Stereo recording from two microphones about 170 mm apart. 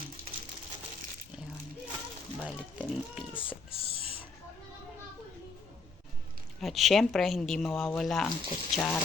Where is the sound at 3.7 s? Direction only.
35° left (ahead or behind).